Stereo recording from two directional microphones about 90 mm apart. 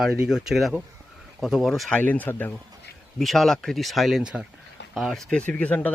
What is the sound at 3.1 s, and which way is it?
Speech, centre (ahead or behind).